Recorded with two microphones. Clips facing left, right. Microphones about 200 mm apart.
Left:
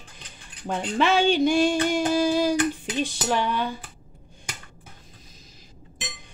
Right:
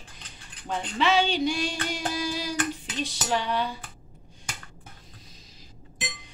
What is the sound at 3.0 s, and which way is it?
Cutlery, 50° left (ahead or behind).